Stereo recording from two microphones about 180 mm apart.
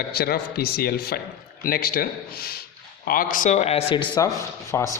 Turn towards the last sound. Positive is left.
turn(degrees=15)  # may be behind; listen again after turning